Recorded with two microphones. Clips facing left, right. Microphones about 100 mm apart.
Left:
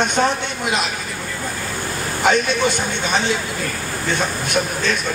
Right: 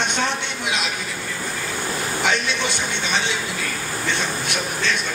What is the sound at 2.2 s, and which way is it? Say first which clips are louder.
Speech: left 7 dB; 45° left (ahead or behind).